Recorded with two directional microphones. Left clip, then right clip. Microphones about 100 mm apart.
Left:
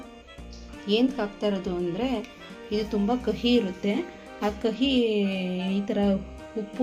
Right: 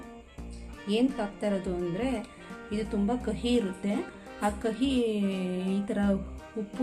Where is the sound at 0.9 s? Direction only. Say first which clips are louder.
Left 4 dB; 25° left (ahead or behind).